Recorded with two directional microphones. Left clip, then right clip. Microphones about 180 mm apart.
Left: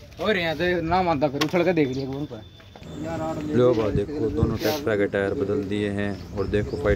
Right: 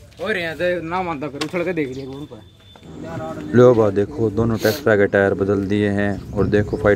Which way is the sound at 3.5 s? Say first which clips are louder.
Right 8 dB; 35° right (ahead or behind).